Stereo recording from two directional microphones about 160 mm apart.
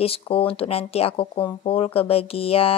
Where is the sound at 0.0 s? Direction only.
35° left (ahead or behind).